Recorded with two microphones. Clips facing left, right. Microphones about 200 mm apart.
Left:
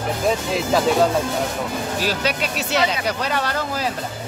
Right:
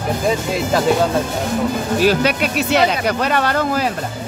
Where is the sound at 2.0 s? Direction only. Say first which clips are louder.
Right 8 dB; 55° right (ahead or behind).